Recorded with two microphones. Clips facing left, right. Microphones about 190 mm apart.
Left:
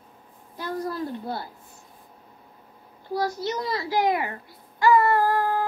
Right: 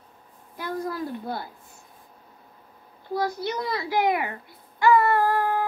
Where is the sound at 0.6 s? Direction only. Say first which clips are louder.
Even; 15° right (ahead or behind).